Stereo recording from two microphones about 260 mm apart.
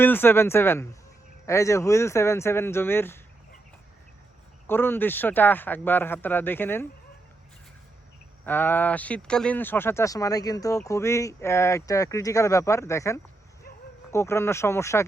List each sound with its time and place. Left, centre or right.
0.0 s speech: centre
4.6 s speech: centre
8.4 s speech: centre